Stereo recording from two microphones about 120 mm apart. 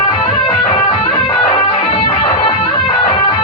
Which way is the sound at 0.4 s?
55° left (ahead or behind).